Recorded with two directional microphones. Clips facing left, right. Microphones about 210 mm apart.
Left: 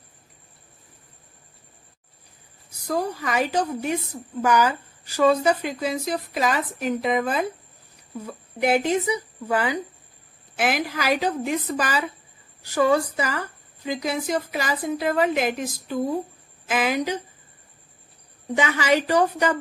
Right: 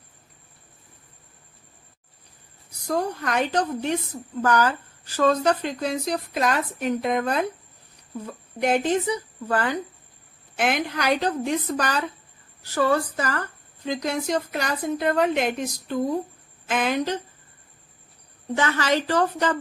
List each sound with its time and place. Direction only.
2.8 s a woman's voice: 5° left (ahead or behind)
18.5 s speech: 15° left (ahead or behind)